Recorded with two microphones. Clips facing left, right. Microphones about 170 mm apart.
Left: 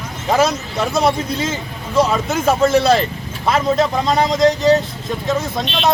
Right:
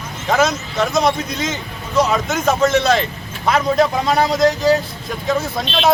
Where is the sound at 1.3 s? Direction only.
30° left (ahead or behind).